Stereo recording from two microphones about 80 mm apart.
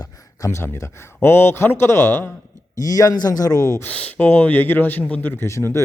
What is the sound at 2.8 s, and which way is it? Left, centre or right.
Speech, left.